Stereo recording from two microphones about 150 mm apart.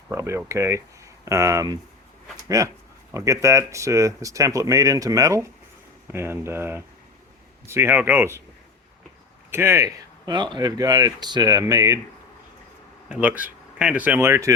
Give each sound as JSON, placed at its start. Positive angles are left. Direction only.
{"t": 0.1, "sound": "speech", "side_deg": -20}
{"t": 9.5, "sound": "speech", "side_deg": -15}
{"t": 13.1, "sound": "speech", "side_deg": -10}